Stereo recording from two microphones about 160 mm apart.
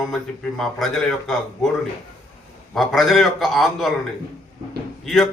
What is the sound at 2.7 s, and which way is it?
A man's voice, centre (ahead or behind).